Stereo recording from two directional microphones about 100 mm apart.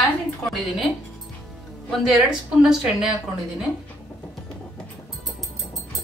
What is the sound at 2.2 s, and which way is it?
A woman's voice, 5° right (ahead or behind).